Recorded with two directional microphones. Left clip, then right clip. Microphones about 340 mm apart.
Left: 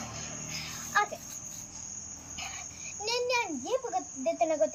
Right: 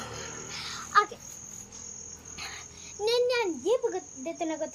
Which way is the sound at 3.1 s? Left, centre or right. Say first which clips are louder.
Right 4 dB; centre.